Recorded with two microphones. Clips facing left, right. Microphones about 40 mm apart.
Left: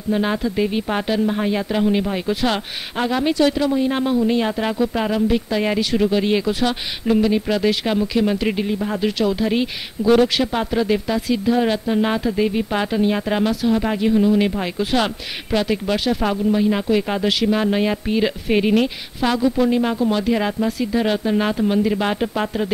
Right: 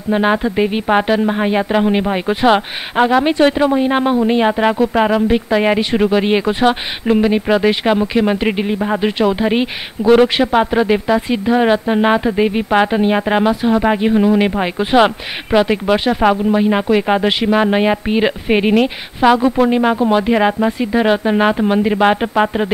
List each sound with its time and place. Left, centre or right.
0.1 s speech: right